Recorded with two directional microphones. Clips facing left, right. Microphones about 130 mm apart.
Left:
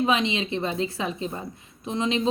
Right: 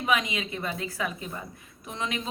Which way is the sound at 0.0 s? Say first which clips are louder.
Left 4 dB; 25° left (ahead or behind).